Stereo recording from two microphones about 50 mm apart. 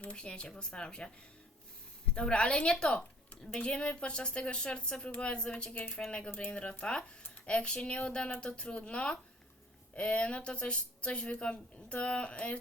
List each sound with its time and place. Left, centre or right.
0.0 s speech: left
2.1 s speech: left